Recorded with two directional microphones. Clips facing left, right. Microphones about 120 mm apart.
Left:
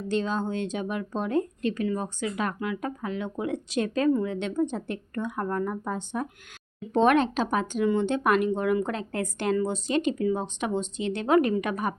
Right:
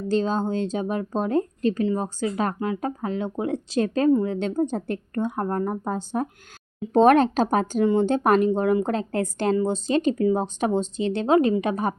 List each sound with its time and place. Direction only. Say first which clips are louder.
0.1 s speech: right 4 dB; 35° right (ahead or behind)